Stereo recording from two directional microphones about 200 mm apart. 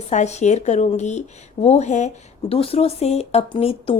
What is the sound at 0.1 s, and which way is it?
A woman's voice, 35° left (ahead or behind).